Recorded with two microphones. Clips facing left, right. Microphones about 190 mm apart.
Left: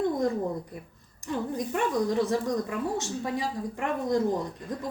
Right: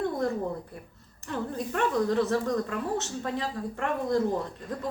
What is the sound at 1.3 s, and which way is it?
A woman's voice, 15° left (ahead or behind).